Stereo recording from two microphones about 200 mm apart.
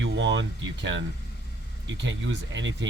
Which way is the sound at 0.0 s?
65° right (ahead or behind).